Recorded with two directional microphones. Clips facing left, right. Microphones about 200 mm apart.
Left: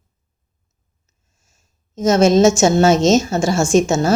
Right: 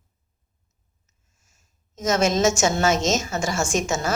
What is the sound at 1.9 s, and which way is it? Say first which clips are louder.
A woman's voice: left 8 dB; 30° left (ahead or behind).